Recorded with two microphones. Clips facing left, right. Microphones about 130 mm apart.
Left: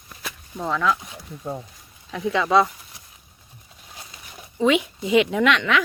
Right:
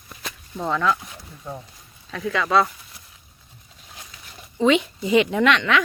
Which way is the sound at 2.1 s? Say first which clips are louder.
Left 2 dB; 20° left (ahead or behind).